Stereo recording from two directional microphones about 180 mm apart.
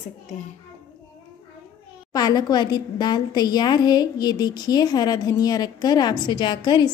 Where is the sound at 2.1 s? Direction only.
20° left (ahead or behind).